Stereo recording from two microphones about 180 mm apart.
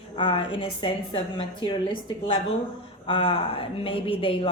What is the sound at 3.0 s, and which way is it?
A woman's voice, 30° left (ahead or behind).